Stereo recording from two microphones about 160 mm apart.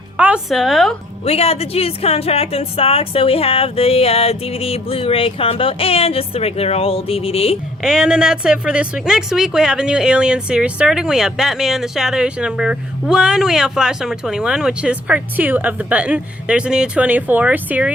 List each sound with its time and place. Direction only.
0.2 s a woman's voice: 5° right (ahead or behind)
1.2 s a woman's voice: 40° left (ahead or behind)
7.8 s a woman's voice: 5° right (ahead or behind)